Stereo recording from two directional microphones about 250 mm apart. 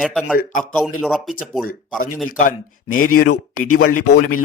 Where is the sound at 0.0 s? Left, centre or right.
Centre.